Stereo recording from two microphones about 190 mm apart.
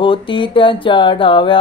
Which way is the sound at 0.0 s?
25° left (ahead or behind).